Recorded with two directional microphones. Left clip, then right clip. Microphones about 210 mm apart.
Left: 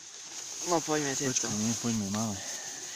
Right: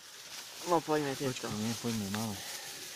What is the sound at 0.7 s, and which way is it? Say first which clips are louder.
Speech: left 1 dB; 10° left (ahead or behind).